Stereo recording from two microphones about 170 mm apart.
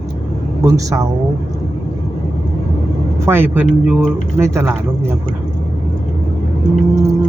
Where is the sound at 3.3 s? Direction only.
15° right (ahead or behind).